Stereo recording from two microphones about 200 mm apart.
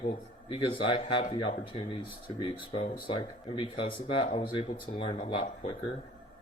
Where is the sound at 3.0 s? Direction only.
25° left (ahead or behind).